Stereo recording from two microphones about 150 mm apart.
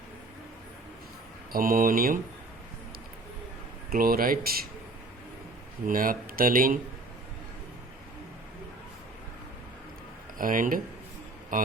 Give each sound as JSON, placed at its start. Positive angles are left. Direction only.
{"t": 1.5, "sound": "speech", "side_deg": -70}
{"t": 3.8, "sound": "speech", "side_deg": -80}
{"t": 5.8, "sound": "speech", "side_deg": -70}
{"t": 10.3, "sound": "speech", "side_deg": -65}